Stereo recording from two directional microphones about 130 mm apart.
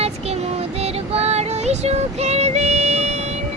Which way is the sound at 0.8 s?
50° right (ahead or behind).